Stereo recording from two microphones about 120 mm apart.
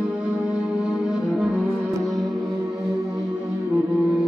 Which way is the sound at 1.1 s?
5° right (ahead or behind).